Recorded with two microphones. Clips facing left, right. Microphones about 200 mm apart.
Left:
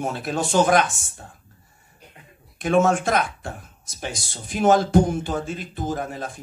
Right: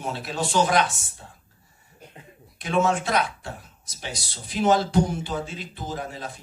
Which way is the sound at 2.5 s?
50° left (ahead or behind).